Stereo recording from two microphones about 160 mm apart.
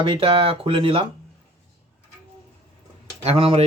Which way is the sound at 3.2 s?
35° right (ahead or behind).